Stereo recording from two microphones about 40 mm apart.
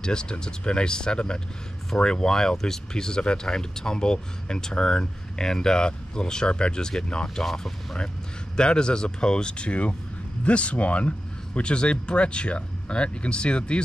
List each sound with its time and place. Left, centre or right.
0.0 s speech: left
8.5 s speech: left